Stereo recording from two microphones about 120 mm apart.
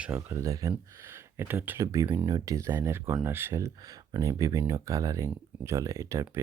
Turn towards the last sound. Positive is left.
turn(degrees=-25)  # may be behind; listen again after turning